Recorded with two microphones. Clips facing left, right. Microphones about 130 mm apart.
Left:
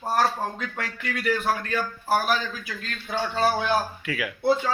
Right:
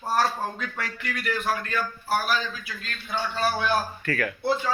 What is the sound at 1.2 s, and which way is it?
Speech, 35° left (ahead or behind).